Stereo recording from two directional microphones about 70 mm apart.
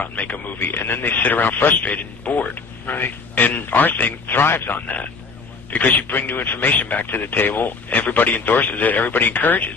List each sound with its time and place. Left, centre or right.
0.0 s speech: left